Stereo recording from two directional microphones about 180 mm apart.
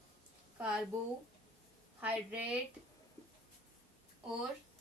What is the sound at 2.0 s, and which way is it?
Speech, 10° right (ahead or behind).